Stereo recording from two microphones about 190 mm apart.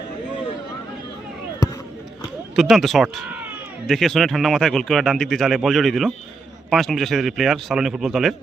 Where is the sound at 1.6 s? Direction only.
20° left (ahead or behind).